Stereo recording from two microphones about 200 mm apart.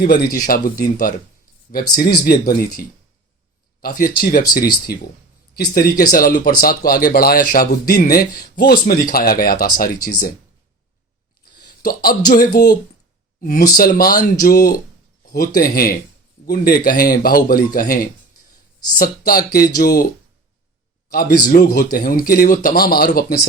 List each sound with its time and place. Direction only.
0.0 s speech: 45° left (ahead or behind)
11.8 s speech: 45° left (ahead or behind)
19.3 s speech: 50° left (ahead or behind)
21.1 s a man's voice: 50° left (ahead or behind)